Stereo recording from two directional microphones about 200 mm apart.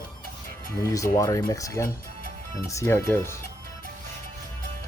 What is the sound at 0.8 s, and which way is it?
Speech, 15° left (ahead or behind).